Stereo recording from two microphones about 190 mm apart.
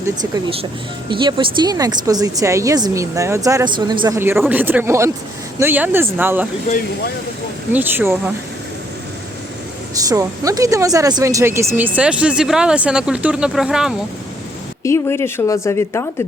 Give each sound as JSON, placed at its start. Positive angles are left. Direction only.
{"t": 0.0, "sound": "speech", "side_deg": -20}
{"t": 4.2, "sound": "speech", "side_deg": -10}
{"t": 7.7, "sound": "speech", "side_deg": -10}
{"t": 10.0, "sound": "speech", "side_deg": -20}
{"t": 14.8, "sound": "speech", "side_deg": 15}